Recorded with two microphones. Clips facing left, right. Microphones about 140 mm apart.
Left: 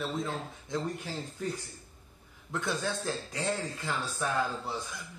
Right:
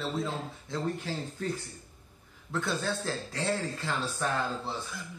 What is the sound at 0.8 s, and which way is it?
Speech, 15° left (ahead or behind).